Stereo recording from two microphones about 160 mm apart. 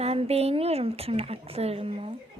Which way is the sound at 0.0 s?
40° right (ahead or behind).